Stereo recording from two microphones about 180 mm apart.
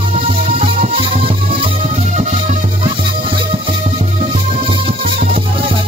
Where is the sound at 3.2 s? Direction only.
30° right (ahead or behind).